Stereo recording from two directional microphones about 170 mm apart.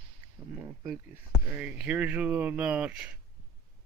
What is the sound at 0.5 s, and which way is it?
Speech, 15° right (ahead or behind).